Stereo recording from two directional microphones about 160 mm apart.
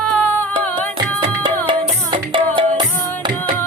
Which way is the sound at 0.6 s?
10° left (ahead or behind).